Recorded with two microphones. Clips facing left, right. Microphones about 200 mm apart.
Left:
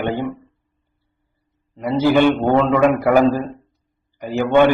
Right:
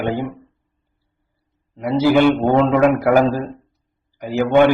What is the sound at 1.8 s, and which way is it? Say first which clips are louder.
Speech: right 1 dB; 10° right (ahead or behind).